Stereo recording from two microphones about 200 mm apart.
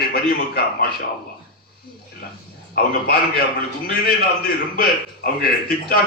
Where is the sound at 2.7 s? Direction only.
50° left (ahead or behind).